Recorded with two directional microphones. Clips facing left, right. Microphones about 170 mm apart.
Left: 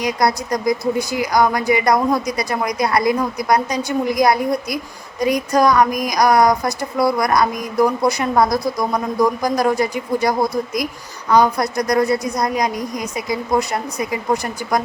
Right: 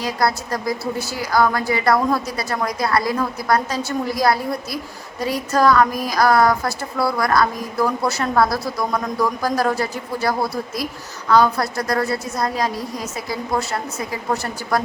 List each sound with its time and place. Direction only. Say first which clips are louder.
0.0 s speech: left 3 dB; 15° left (ahead or behind)